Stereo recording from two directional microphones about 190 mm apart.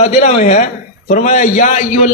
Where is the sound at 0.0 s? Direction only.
40° left (ahead or behind).